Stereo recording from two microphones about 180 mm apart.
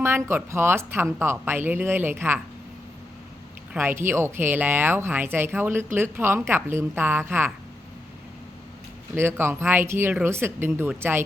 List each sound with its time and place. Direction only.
0.0 s speech: 15° right (ahead or behind)
3.8 s speech: 10° right (ahead or behind)
9.1 s speech: 15° right (ahead or behind)